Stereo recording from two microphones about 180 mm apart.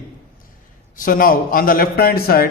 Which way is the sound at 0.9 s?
50° left (ahead or behind).